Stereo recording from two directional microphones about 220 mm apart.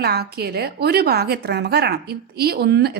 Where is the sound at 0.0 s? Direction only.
45° right (ahead or behind).